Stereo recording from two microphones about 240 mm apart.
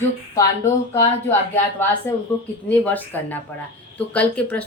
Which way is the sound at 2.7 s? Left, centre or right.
Centre.